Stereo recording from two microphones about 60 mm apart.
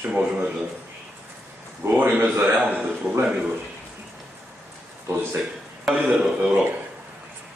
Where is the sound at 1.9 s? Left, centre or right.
Right.